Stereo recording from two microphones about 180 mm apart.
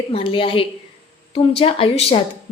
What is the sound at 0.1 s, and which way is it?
A woman's voice, 30° left (ahead or behind).